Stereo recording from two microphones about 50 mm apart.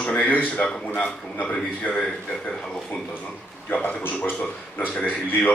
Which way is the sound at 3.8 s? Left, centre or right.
Left.